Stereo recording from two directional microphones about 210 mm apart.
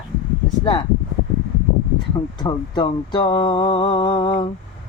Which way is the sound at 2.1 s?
20° left (ahead or behind).